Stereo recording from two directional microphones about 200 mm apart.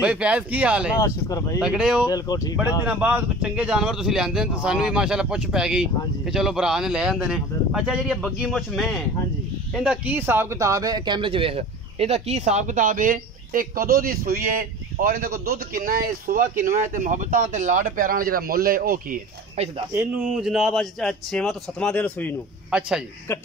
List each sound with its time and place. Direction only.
0.0 s speech: 5° right (ahead or behind)
0.9 s speech: 15° left (ahead or behind)
1.6 s speech: 5° right (ahead or behind)
2.0 s speech: 20° left (ahead or behind)
2.9 s a man's voice: 5° right (ahead or behind); by 19.1 s 45° right (ahead or behind)
19.9 s speech: 5° right (ahead or behind)
22.7 s speech: 5° right (ahead or behind)